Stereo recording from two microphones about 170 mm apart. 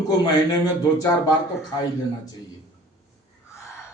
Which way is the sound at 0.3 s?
20° left (ahead or behind).